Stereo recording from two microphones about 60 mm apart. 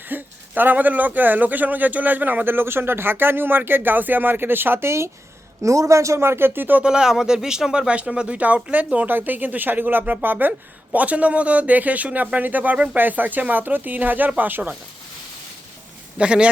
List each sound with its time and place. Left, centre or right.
0.1 s speech: right
5.6 s speech: right
6.8 s speech: centre; by 14.8 s right
16.1 s speech: centre